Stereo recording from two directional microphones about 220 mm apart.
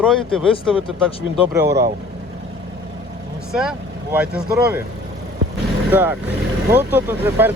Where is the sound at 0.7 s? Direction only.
25° left (ahead or behind).